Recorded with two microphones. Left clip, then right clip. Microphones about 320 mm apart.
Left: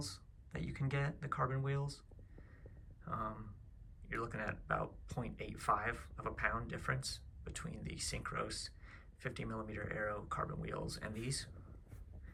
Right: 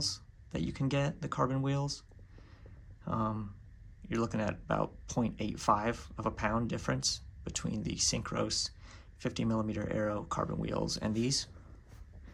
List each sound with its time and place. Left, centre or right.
0.0 s speech: centre
3.1 s speech: centre